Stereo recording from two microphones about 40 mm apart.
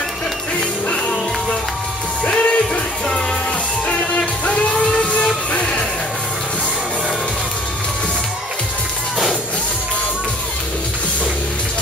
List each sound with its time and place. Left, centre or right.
0.6 s music: left
2.3 s music: left
4.5 s music: left
4.7 s music: centre
5.5 s music: left